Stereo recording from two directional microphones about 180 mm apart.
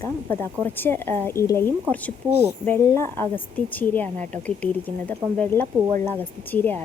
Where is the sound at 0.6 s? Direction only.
10° left (ahead or behind).